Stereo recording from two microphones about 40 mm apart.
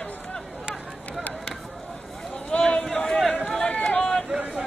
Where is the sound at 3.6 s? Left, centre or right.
Left.